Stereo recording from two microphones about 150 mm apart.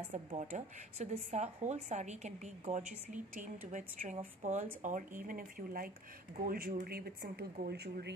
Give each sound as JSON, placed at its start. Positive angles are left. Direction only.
{"t": 0.1, "sound": "speech", "side_deg": -50}
{"t": 5.2, "sound": "speech", "side_deg": -65}
{"t": 6.4, "sound": "speech", "side_deg": -80}